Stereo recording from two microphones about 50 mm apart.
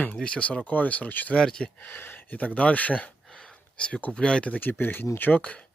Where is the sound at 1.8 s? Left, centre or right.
Left.